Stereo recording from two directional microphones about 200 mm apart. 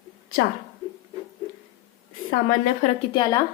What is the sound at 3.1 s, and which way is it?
Speech, 20° left (ahead or behind).